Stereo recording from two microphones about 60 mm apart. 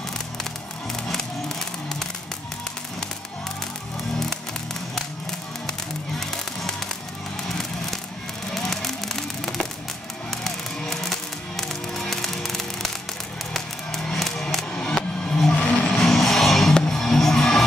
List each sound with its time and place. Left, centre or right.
1.0 s music: centre
6.1 s music: centre
8.5 s music: centre
14.0 s music: centre
15.5 s a sound: left
16.1 s music: centre